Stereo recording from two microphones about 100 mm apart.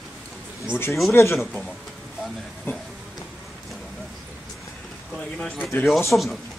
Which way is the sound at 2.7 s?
25° left (ahead or behind).